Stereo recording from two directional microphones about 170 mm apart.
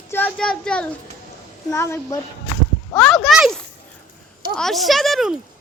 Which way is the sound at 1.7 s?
15° left (ahead or behind).